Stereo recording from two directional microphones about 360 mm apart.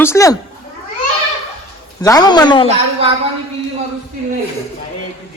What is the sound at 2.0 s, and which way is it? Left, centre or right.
Speech, centre.